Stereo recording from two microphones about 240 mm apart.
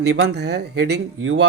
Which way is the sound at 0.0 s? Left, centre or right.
Right.